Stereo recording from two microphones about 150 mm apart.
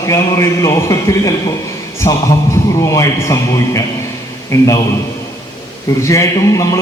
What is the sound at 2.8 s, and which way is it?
Speech, 20° left (ahead or behind).